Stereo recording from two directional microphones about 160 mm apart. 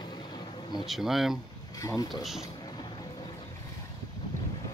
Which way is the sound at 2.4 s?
25° left (ahead or behind).